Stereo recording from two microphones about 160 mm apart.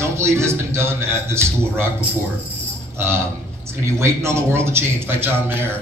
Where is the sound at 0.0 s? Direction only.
15° right (ahead or behind).